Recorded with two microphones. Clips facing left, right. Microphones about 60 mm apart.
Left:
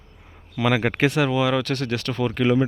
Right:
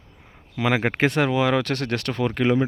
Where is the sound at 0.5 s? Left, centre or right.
Right.